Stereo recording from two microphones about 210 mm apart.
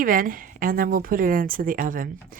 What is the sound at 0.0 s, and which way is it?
A woman's voice, 40° right (ahead or behind).